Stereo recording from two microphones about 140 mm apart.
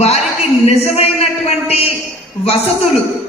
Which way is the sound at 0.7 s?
45° left (ahead or behind).